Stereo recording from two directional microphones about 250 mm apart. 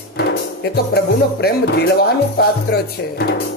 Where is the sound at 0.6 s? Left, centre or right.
Left.